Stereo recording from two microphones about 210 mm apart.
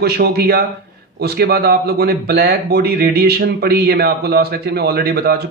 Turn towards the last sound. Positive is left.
turn(degrees=-50)  # may be behind; listen again after turning